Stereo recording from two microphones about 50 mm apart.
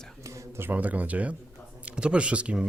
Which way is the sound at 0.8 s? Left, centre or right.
Right.